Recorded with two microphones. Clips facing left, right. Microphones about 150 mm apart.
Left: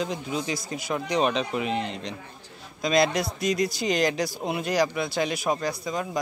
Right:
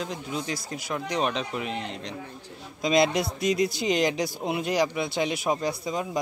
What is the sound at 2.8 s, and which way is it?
A man's voice, 20° right (ahead or behind).